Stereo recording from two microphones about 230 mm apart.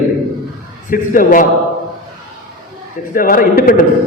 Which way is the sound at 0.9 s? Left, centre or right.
Left.